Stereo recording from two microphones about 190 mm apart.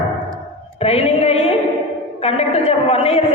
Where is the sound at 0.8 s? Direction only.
35° left (ahead or behind).